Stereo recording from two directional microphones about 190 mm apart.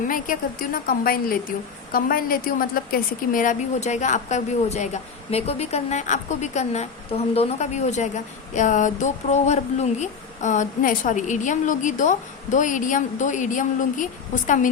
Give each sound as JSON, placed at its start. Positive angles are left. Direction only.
{"t": 0.1, "sound": "a woman's voice", "side_deg": 45}